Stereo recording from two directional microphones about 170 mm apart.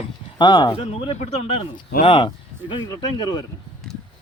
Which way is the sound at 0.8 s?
35° left (ahead or behind).